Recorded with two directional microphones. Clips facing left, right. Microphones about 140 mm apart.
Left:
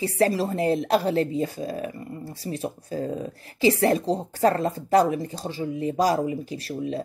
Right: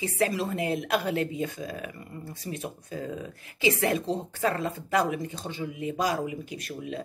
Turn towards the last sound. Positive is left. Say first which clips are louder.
# left 6 dB
turn(degrees=35)  # may be behind; listen again after turning